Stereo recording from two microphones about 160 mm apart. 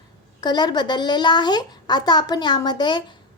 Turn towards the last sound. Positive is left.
turn(degrees=30)  # may be behind; listen again after turning